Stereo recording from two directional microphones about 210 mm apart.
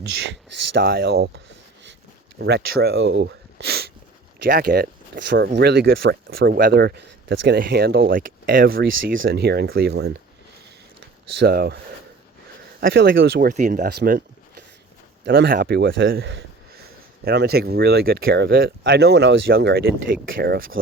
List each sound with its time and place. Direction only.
0.8 s speech: 45° right (ahead or behind)
2.4 s speech: 50° right (ahead or behind)
11.3 s speech: 45° right (ahead or behind)
12.8 s speech: 45° right (ahead or behind)